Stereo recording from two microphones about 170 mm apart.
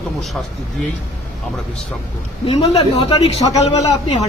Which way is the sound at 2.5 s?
30° left (ahead or behind).